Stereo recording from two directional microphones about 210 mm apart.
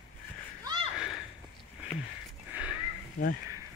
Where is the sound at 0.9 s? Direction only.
5° right (ahead or behind).